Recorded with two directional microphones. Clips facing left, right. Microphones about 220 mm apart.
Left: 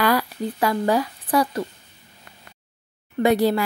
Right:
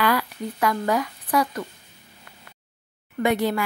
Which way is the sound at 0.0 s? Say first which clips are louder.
Left 2 dB; 35° left (ahead or behind).